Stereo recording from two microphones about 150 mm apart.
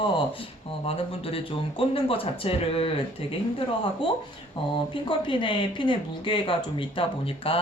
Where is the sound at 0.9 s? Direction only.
40° left (ahead or behind).